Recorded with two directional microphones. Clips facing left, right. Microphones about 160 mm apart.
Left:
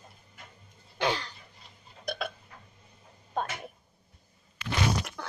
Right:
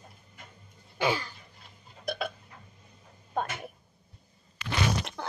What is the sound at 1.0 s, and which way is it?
Throat clearing, 5° right (ahead or behind).